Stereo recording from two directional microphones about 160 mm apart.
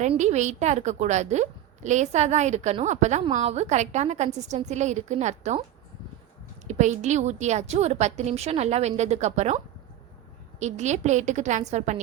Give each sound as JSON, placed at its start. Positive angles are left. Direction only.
{"t": 0.2, "sound": "a woman's voice", "side_deg": -45}
{"t": 6.7, "sound": "a woman's voice", "side_deg": -45}
{"t": 10.6, "sound": "a woman's voice", "side_deg": -45}